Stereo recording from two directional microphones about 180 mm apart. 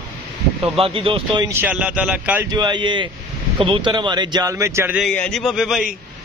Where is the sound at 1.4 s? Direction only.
10° right (ahead or behind).